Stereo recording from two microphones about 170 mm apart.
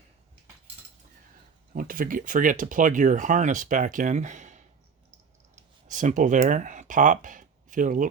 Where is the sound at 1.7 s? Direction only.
55° right (ahead or behind).